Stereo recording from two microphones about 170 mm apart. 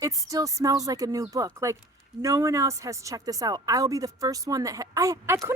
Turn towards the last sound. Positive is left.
turn(degrees=-15)  # may be behind; listen again after turning